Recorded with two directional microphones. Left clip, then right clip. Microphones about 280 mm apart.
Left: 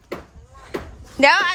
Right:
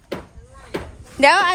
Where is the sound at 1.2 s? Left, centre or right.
Centre.